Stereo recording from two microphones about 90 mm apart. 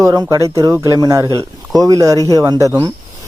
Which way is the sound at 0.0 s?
40° right (ahead or behind).